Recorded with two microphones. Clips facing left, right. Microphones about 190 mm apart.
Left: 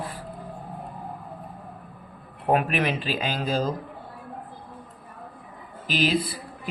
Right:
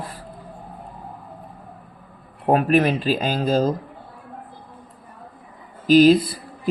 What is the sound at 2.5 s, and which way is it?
A man's voice, 40° right (ahead or behind).